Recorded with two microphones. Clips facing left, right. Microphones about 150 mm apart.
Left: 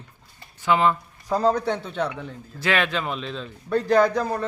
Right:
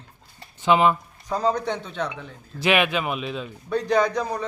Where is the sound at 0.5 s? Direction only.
20° right (ahead or behind).